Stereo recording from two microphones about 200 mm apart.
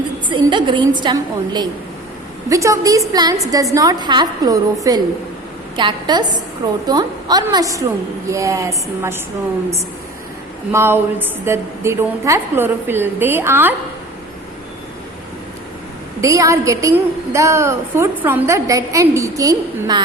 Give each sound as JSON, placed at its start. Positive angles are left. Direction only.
{"t": 0.3, "sound": "a woman's voice", "side_deg": -25}
{"t": 10.7, "sound": "a woman's voice", "side_deg": -10}
{"t": 16.2, "sound": "a woman's voice", "side_deg": -15}